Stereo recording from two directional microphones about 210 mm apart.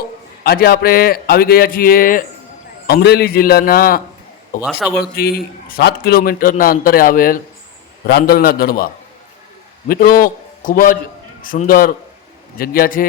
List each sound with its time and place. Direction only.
0.4 s a man's voice: 45° left (ahead or behind)
9.9 s a man's voice: 40° left (ahead or behind)